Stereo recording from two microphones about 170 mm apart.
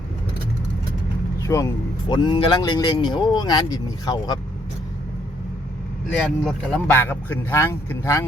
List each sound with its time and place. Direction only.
1.4 s speech: 20° left (ahead or behind)
6.1 s speech: 5° left (ahead or behind)
6.9 s speech: 15° left (ahead or behind)